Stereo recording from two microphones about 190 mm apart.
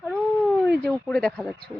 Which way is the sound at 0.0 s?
Centre (ahead or behind).